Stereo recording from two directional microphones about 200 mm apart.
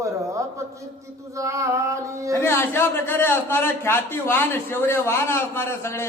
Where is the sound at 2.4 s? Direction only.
10° left (ahead or behind).